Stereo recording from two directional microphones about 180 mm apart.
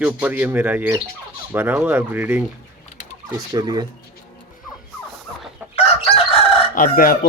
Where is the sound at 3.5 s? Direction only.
20° right (ahead or behind).